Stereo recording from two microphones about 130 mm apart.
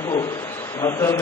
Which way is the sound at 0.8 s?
20° left (ahead or behind).